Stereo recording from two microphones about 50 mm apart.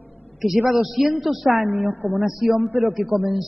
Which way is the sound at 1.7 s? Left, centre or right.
Right.